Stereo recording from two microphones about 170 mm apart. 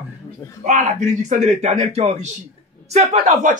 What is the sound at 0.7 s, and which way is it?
A man's voice, 45° right (ahead or behind).